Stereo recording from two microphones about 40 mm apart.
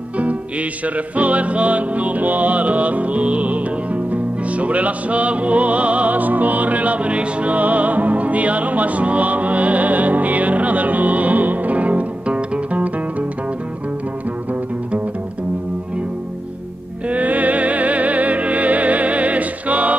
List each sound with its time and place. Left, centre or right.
0.2 s music: right
17.1 s music: right